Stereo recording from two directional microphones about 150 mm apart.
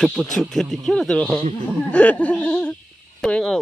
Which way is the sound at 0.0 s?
Centre (ahead or behind).